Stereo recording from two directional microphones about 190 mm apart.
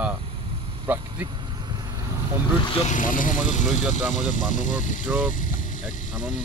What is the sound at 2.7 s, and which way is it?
Speech, 40° left (ahead or behind).